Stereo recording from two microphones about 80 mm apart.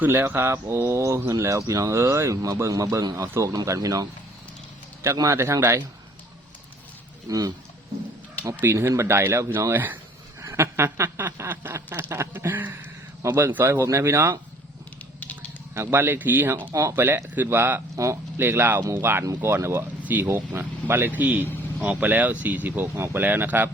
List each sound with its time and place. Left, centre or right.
0.0 s speech: right
5.3 s speech: right
7.3 s speech: right
8.6 s speech: right
9.7 s speech: right
10.4 s speech: right
12.5 s speech: right
15.2 s a sound: centre
15.7 s speech: right
17.9 s speech: right
18.3 s speech: right
20.0 s a sound: right
20.2 s speech: right